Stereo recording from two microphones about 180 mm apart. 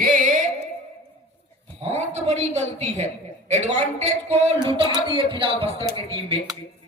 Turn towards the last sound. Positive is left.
turn(degrees=-30)  # may be behind; listen again after turning